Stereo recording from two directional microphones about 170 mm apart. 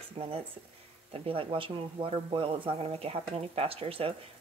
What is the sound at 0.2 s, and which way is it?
Speech, 35° right (ahead or behind).